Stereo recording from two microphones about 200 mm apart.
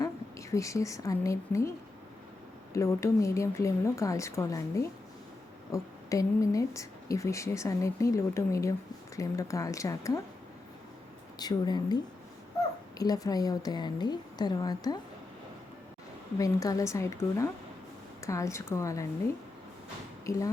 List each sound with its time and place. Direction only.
0.0 s a woman's voice: 15° left (ahead or behind)
2.7 s a woman's voice: 15° left (ahead or behind)
11.3 s a woman's voice: 20° left (ahead or behind)
13.0 s a woman's voice: 20° left (ahead or behind)
16.4 s a woman's voice: 15° left (ahead or behind)
20.3 s a woman's voice: 15° left (ahead or behind)